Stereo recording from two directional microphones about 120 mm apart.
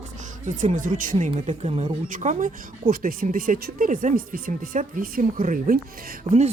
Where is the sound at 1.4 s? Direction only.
70° right (ahead or behind); by 5.3 s 90° right.